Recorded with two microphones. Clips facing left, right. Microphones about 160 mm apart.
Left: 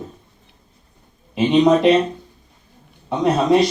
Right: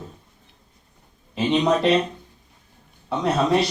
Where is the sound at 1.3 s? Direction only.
15° left (ahead or behind).